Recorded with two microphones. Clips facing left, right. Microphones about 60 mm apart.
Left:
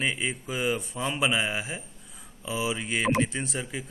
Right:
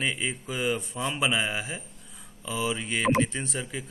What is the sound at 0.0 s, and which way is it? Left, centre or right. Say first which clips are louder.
A man's voice: left 1 dB; centre.